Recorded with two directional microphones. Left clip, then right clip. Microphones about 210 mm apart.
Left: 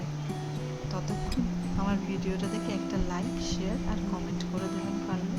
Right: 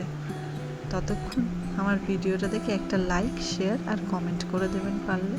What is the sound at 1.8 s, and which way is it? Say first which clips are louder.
Speech: right 6 dB; 15° right (ahead or behind).